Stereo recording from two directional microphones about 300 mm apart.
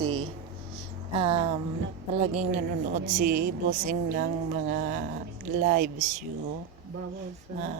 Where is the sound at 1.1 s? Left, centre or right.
Centre.